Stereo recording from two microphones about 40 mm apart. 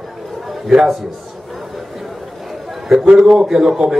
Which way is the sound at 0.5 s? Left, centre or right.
Centre.